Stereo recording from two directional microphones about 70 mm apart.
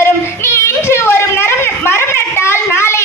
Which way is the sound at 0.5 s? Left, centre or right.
Left.